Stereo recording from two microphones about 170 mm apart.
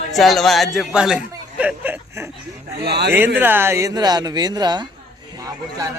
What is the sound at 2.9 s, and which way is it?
Speech, 75° right (ahead or behind).